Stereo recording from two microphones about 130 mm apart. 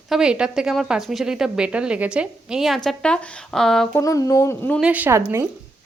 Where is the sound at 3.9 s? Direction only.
25° left (ahead or behind).